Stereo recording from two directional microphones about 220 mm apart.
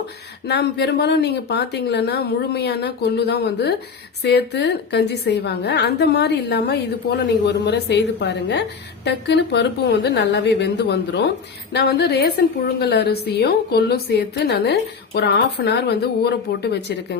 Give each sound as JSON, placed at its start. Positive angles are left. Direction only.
{"t": 0.4, "sound": "a woman's voice", "side_deg": 50}